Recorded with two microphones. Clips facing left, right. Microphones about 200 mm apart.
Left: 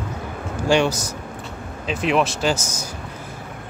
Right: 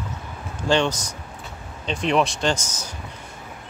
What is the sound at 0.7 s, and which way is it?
A man's voice, 10° left (ahead or behind).